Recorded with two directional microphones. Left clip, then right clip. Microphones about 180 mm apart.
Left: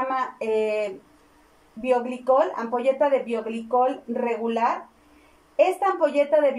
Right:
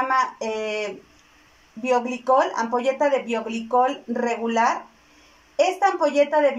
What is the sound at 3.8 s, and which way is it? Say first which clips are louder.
Speech: right 2 dB; 15° left (ahead or behind).